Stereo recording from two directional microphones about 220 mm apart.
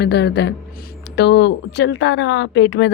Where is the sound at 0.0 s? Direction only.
50° left (ahead or behind).